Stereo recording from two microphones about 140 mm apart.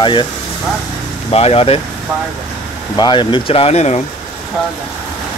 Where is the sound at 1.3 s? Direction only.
45° left (ahead or behind).